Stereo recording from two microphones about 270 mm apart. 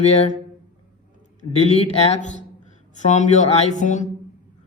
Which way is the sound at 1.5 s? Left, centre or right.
Left.